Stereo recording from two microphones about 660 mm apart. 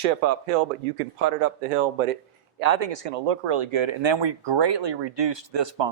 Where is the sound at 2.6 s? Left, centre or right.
Right.